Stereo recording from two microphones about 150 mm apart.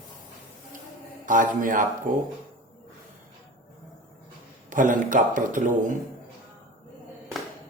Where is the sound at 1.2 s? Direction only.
60° right (ahead or behind).